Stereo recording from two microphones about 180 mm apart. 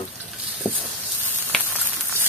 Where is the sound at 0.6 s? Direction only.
10° right (ahead or behind).